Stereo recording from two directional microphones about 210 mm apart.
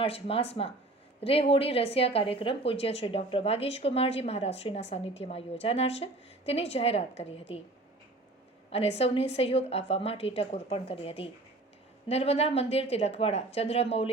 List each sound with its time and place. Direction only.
0.0 s speech: 25° left (ahead or behind)
9.0 s speech: 30° left (ahead or behind)